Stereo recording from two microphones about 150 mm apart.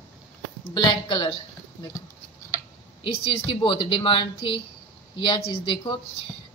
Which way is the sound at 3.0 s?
40° left (ahead or behind).